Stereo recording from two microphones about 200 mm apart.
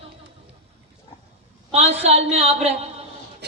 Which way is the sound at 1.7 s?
30° right (ahead or behind).